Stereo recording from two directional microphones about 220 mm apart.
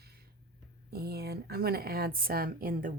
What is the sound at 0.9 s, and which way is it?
A woman's voice, 45° right (ahead or behind).